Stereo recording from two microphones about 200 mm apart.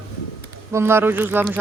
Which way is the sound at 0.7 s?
10° right (ahead or behind).